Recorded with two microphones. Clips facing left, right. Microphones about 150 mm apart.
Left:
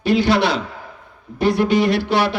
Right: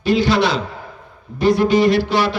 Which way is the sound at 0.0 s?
60° left (ahead or behind).